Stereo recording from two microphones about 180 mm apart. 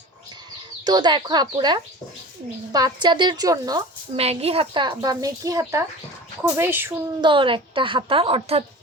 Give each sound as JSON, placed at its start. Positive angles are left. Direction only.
{"t": 0.9, "sound": "speech", "side_deg": -25}
{"t": 4.2, "sound": "a child's voice", "side_deg": -35}
{"t": 7.2, "sound": "speech", "side_deg": -25}